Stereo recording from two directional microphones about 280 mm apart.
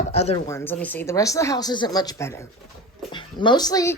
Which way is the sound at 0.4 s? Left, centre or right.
Centre.